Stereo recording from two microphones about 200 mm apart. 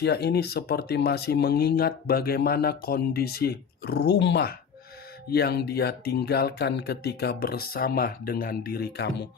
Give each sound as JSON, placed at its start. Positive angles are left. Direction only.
{"t": 0.0, "sound": "speech", "side_deg": 55}